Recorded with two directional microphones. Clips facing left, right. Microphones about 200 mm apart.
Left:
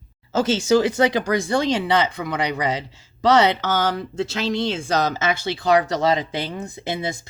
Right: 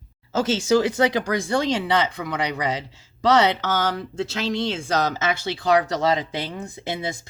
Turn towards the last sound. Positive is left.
turn(degrees=25)  # may be behind; listen again after turning